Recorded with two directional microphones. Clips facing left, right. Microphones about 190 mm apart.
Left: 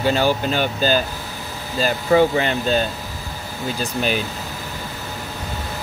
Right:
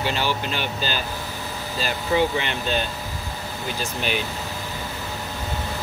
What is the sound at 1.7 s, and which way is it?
Speech, 45° left (ahead or behind).